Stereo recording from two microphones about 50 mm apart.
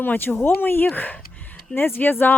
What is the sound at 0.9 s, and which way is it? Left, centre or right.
Speech, left.